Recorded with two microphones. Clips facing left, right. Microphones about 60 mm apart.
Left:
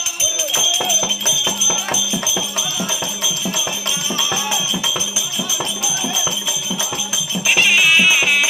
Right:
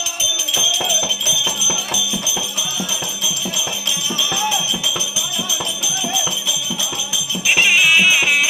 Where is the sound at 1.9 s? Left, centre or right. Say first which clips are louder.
Left 1 dB; left.